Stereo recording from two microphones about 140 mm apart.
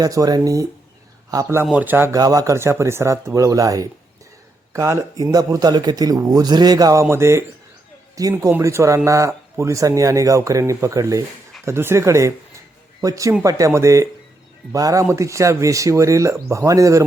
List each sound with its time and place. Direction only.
0.0 s speech: 25° right (ahead or behind)
1.6 s speech: 10° right (ahead or behind)
2.1 s speech: 25° right (ahead or behind)